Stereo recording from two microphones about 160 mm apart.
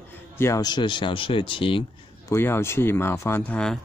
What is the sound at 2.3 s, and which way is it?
Speech, 15° left (ahead or behind).